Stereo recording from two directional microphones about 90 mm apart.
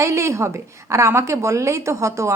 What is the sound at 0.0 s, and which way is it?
A woman's voice, 35° right (ahead or behind).